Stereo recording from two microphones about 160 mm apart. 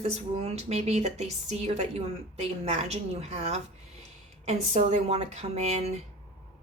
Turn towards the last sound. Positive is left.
turn(degrees=-40)  # may be behind; listen again after turning